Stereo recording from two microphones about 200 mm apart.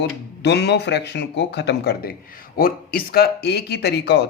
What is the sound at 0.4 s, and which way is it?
Speech, 60° left (ahead or behind).